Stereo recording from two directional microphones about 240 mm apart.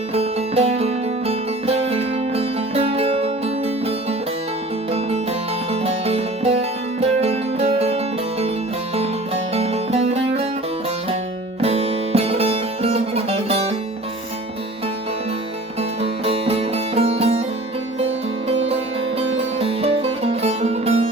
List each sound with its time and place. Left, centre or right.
0.1 s music: right
11.6 s music: right
15.8 s music: right
19.5 s music: right